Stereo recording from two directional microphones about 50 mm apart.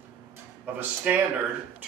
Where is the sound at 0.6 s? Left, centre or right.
Right.